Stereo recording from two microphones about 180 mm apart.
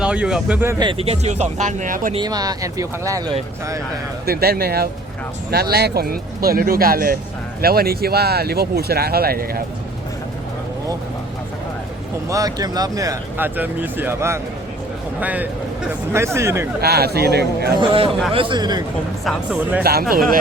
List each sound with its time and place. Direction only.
0.0 s speech: 5° right (ahead or behind)
0.8 s speech: 30° right (ahead or behind); by 2.1 s 45° right (ahead or behind)
2.1 s speech: 20° right (ahead or behind)
4.3 s speech: 60° right (ahead or behind)
12.3 s speech: 20° right (ahead or behind)
16.8 s speech: 60° right (ahead or behind)
17.7 s speech: 30° right (ahead or behind)
19.2 s speech: centre (ahead or behind)
19.8 s speech: 60° right (ahead or behind)